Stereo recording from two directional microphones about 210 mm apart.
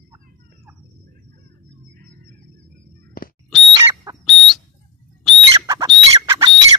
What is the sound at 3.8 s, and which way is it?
Bird, 15° right (ahead or behind).